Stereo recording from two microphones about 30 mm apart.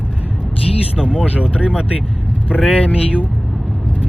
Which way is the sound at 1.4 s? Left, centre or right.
Right.